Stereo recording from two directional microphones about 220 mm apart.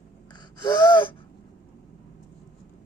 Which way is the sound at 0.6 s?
20° left (ahead or behind).